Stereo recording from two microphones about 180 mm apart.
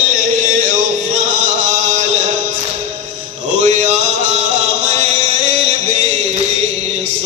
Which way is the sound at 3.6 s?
40° right (ahead or behind).